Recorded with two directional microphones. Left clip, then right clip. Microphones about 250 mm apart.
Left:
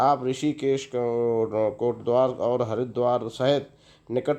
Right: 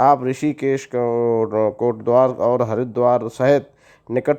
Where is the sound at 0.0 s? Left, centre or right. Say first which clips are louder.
Right 7 dB; right.